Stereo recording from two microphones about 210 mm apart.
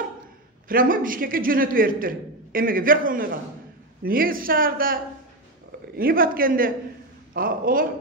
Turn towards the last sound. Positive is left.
turn(degrees=-40)  # may be behind; listen again after turning